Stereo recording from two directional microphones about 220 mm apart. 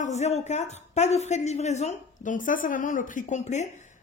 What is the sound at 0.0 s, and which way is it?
A woman's voice, 30° left (ahead or behind).